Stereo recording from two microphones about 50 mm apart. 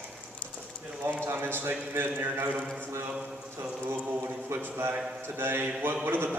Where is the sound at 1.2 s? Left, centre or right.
Right.